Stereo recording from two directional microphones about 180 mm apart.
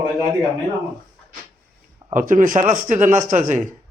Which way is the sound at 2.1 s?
45° right (ahead or behind).